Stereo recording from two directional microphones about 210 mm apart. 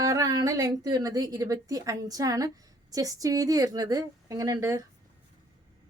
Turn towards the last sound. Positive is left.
turn(degrees=-15)  # may be behind; listen again after turning